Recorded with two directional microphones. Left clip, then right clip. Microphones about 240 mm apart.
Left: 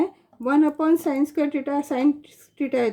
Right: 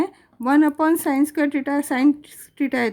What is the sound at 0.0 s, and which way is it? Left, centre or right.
A woman's voice, right.